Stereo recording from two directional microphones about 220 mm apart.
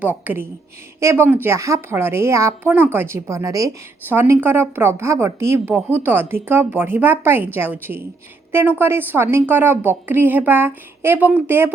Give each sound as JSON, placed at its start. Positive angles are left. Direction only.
{"t": 0.0, "sound": "a woman's voice", "side_deg": -10}